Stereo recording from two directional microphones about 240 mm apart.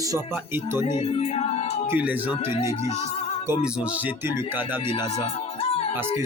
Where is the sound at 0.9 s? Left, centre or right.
Left.